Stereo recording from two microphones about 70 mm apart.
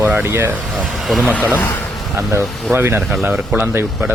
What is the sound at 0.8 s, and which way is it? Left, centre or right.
Speech, centre.